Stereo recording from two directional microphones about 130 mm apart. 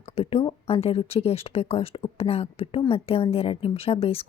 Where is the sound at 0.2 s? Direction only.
50° left (ahead or behind).